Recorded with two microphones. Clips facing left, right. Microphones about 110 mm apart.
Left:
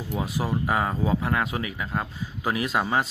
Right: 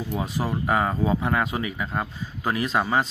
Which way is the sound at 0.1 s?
5° left (ahead or behind).